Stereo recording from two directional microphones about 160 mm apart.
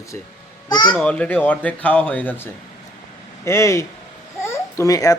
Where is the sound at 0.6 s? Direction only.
25° left (ahead or behind).